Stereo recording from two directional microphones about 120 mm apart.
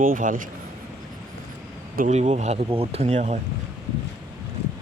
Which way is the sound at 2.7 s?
55° right (ahead or behind).